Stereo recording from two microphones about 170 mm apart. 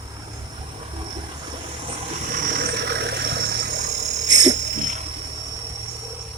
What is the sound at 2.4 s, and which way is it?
Vehicle, 55° right (ahead or behind).